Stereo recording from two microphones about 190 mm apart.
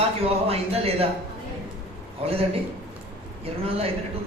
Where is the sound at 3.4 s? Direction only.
30° right (ahead or behind).